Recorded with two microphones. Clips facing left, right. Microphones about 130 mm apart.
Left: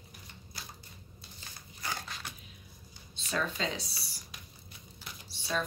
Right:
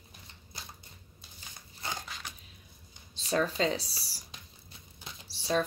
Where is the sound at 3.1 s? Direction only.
35° right (ahead or behind).